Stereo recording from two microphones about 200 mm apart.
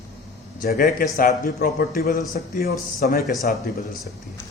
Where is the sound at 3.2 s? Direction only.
Centre (ahead or behind).